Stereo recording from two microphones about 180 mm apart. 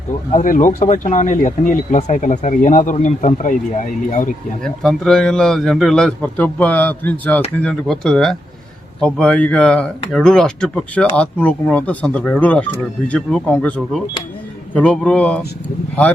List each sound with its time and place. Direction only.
0.3 s speech: 45° left (ahead or behind)
4.6 s a man's voice: 5° left (ahead or behind)